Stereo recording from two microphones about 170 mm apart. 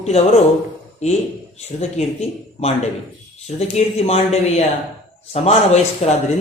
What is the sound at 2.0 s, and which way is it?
Speech, 40° left (ahead or behind).